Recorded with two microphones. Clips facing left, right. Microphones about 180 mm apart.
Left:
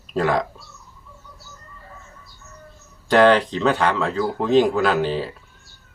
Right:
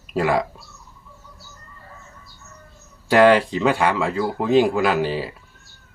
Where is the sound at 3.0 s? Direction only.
10° right (ahead or behind).